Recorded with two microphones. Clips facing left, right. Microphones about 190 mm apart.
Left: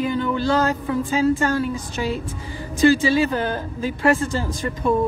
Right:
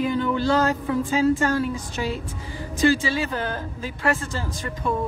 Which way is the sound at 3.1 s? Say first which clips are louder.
Left 6 dB; 15° left (ahead or behind).